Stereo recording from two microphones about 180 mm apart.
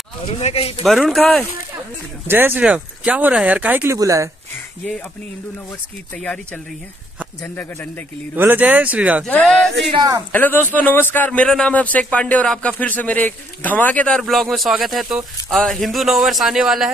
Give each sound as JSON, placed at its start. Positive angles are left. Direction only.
{"t": 0.4, "sound": "speech", "side_deg": 35}
{"t": 0.8, "sound": "speech", "side_deg": 0}
{"t": 2.2, "sound": "speech", "side_deg": -10}
{"t": 6.1, "sound": "speech", "side_deg": 5}
{"t": 8.4, "sound": "speech", "side_deg": -10}
{"t": 9.2, "sound": "speech", "side_deg": 5}
{"t": 9.9, "sound": "a woman's voice", "side_deg": -20}
{"t": 10.3, "sound": "speech", "side_deg": 10}